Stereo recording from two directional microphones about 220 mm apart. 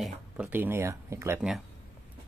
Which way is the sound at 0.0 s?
5° right (ahead or behind).